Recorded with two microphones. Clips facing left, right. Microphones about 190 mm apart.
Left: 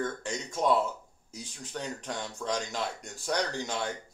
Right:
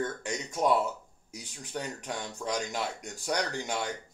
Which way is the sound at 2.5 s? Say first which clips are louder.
Even; 10° right (ahead or behind).